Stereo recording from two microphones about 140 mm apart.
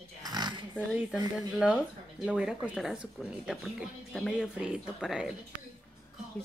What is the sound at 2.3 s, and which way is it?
Speech, 5° right (ahead or behind).